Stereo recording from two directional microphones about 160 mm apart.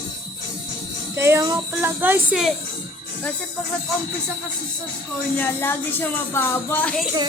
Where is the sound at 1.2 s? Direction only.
15° right (ahead or behind).